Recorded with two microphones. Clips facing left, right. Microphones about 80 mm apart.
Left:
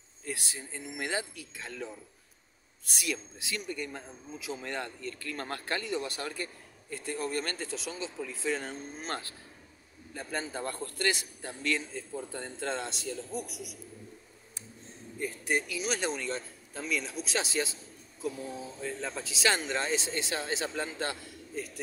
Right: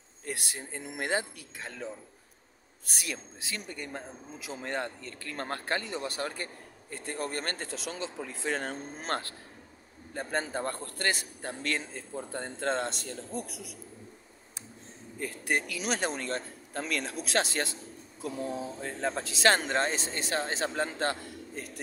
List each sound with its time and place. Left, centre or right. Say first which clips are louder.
0.2 s speech: right 1 dB; right
1.6 s a man's voice: even; right
3.0 s speech: left 3 dB; right
15.1 s speech: left 1 dB; right
15.5 s speech: right 1 dB; right
16.0 s speech: right 1 dB; right